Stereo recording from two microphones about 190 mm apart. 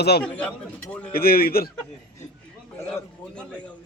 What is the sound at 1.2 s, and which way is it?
Speech, 50° left (ahead or behind).